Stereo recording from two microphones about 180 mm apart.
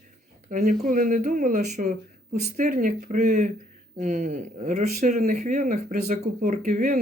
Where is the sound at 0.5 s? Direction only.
45° right (ahead or behind).